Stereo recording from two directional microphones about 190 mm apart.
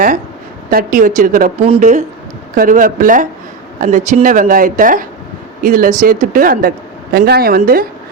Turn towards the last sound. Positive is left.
turn(degrees=-50)  # may be behind; listen again after turning